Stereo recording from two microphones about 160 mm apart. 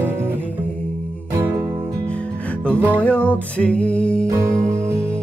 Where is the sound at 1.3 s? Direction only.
20° right (ahead or behind).